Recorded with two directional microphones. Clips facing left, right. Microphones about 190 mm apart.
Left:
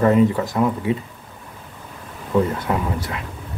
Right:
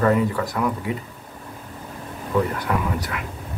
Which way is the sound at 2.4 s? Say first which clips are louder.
Left 2 dB; 25° left (ahead or behind).